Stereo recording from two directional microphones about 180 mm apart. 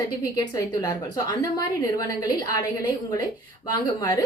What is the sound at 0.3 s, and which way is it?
A woman's voice, 20° left (ahead or behind).